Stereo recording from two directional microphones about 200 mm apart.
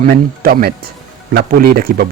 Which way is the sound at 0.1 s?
50° right (ahead or behind).